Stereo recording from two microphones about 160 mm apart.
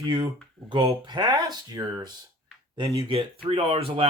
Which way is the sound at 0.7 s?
30° right (ahead or behind).